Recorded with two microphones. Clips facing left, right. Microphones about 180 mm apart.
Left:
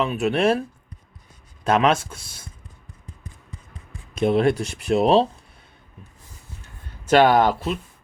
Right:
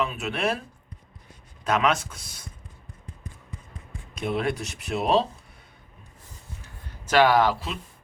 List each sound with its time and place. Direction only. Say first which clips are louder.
0.0 s speech: left 7 dB; 25° left (ahead or behind)
1.6 s speech: left 5 dB; 30° left (ahead or behind)
4.2 s speech: left 8 dB; 30° left (ahead or behind)
7.2 s speech: left 2 dB; 50° left (ahead or behind)